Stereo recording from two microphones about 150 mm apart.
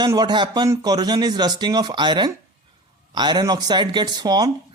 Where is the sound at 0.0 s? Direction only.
30° right (ahead or behind).